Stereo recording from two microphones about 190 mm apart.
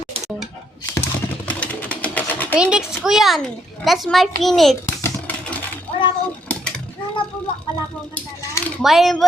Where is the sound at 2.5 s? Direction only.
5° right (ahead or behind).